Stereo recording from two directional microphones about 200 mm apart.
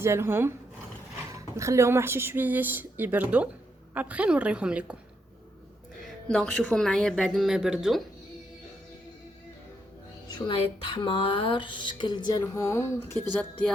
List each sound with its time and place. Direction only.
0.0 s speech: 15° right (ahead or behind)
6.2 s speech: 5° left (ahead or behind)
10.2 s speech: 20° left (ahead or behind); by 13.7 s 5° left (ahead or behind)